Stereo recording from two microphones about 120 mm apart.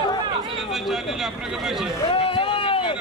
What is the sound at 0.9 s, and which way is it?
Speech, 5° right (ahead or behind).